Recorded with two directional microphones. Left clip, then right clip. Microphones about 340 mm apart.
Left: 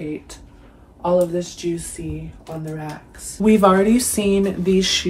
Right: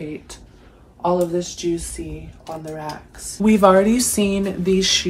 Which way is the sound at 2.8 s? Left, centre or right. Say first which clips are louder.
Right 2 dB; centre.